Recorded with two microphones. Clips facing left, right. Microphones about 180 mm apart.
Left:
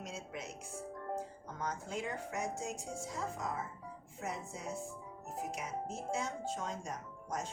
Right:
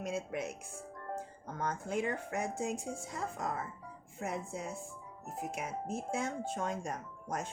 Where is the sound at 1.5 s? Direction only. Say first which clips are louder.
Right 7 dB; 55° right (ahead or behind).